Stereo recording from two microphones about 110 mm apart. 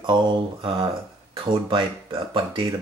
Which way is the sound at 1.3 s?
50° right (ahead or behind).